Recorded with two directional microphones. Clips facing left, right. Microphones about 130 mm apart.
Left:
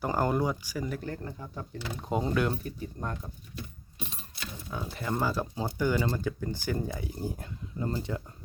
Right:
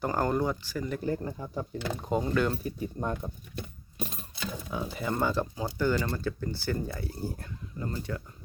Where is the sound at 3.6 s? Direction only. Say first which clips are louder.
Right 3 dB; 55° right (ahead or behind).